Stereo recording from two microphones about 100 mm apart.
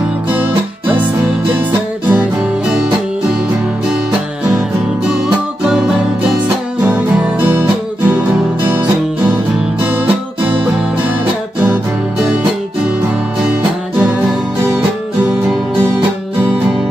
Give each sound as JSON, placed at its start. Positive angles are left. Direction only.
{"t": 0.3, "sound": "guitar", "side_deg": -15}
{"t": 1.5, "sound": "music", "side_deg": -15}
{"t": 5.7, "sound": "music", "side_deg": -5}
{"t": 6.8, "sound": "music", "side_deg": -20}
{"t": 8.6, "sound": "music", "side_deg": -15}
{"t": 13.5, "sound": "music", "side_deg": -10}